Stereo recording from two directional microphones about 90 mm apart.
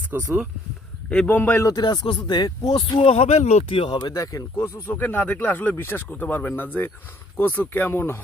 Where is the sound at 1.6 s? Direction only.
45° left (ahead or behind).